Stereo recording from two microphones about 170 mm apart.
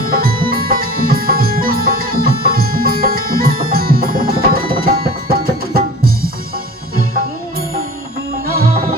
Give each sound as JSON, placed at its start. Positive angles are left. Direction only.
{"t": 0.1, "sound": "music", "side_deg": -60}
{"t": 8.4, "sound": "music", "side_deg": -60}